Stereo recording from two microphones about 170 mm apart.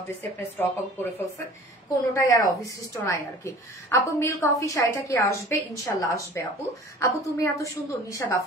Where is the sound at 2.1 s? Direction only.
20° left (ahead or behind).